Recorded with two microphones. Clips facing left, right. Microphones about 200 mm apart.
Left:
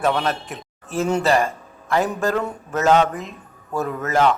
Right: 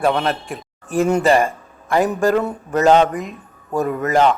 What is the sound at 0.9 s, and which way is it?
Speech, 15° right (ahead or behind).